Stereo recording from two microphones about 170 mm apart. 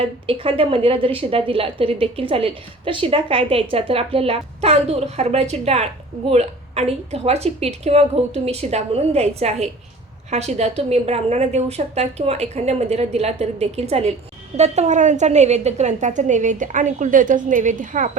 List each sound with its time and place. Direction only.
0.0 s a woman's voice: 30° right (ahead or behind); by 18.2 s 50° right (ahead or behind)